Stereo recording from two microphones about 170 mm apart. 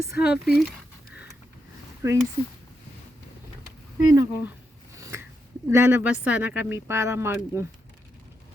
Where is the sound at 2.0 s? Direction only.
20° right (ahead or behind).